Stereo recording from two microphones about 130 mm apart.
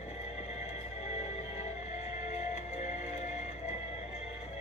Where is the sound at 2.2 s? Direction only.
60° left (ahead or behind).